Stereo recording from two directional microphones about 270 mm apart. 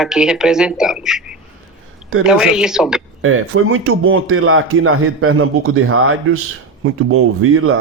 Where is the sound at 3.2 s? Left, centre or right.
Right.